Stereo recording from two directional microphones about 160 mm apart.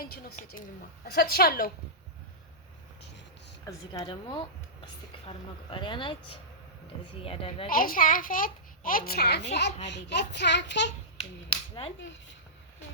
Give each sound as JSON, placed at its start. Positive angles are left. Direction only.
{"t": 0.0, "sound": "a child's voice", "side_deg": 65}
{"t": 1.0, "sound": "a woman's voice", "side_deg": 80}
{"t": 3.7, "sound": "a woman's voice", "side_deg": 30}
{"t": 5.7, "sound": "a woman's voice", "side_deg": 30}
{"t": 7.7, "sound": "a child's voice", "side_deg": 65}
{"t": 11.4, "sound": "a woman's voice", "side_deg": 35}